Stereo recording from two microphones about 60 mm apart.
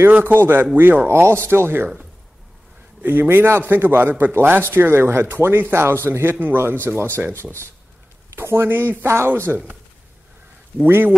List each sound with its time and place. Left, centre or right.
0.1 s a man's voice: right
3.0 s a man's voice: right
8.3 s a man's voice: right
9.0 s speech: right